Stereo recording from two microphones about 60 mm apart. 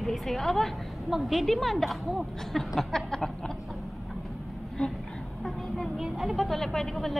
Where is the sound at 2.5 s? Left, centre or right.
Centre.